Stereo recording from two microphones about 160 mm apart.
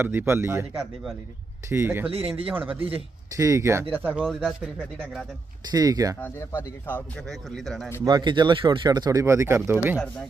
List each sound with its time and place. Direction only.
0.0 s speech: 15° right (ahead or behind)
2.0 s a man's voice: 35° right (ahead or behind)
3.3 s speech: 20° right (ahead or behind); by 5.2 s 5° right (ahead or behind)
5.7 s speech: 25° right (ahead or behind)
6.1 s speech: 15° left (ahead or behind)
8.0 s speech: 25° right (ahead or behind); by 10.0 s 10° right (ahead or behind)